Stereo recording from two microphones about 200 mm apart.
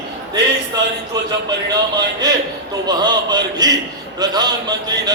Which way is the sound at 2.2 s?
20° right (ahead or behind).